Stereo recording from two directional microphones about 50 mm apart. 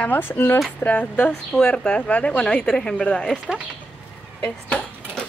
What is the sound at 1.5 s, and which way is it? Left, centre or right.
A woman's voice, centre.